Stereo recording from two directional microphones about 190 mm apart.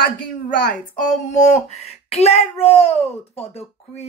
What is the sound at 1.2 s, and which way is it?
A woman's voice, 40° left (ahead or behind).